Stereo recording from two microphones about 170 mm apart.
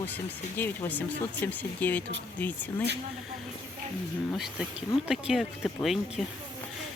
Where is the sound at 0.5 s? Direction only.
10° left (ahead or behind).